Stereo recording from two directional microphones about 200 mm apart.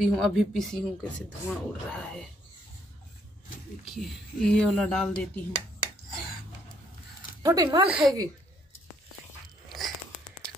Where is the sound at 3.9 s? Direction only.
Centre (ahead or behind).